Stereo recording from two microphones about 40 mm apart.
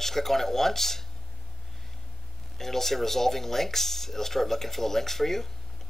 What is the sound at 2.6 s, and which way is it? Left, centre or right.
Speech, centre.